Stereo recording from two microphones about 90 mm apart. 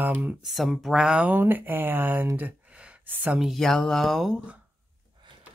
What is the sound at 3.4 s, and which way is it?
Speech, 5° left (ahead or behind).